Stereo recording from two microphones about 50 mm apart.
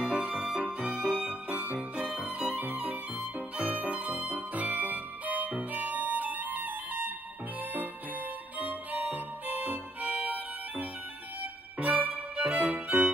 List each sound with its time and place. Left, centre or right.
0.0 s music: right
1.5 s music: right
1.8 s music: right
8.5 s music: right